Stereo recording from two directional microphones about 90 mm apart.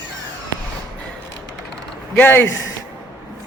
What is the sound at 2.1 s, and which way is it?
Speech, 25° left (ahead or behind).